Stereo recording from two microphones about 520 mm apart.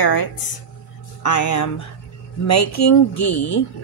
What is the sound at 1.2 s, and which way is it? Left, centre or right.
A woman's voice, left.